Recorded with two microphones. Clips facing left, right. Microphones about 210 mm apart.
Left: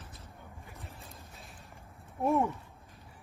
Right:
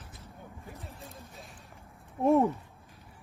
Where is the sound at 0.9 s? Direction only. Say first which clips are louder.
Right 4 dB; centre (ahead or behind).